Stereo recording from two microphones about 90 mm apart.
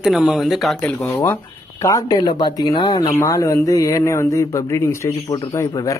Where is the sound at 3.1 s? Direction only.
40° left (ahead or behind).